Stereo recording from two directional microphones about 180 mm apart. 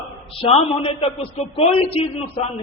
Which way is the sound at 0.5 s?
35° left (ahead or behind).